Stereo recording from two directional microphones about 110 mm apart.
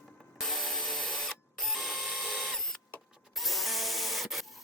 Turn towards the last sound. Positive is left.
turn(degrees=0)  # may be behind; listen again after turning